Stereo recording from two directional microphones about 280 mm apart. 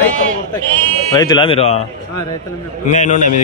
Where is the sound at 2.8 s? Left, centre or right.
Left.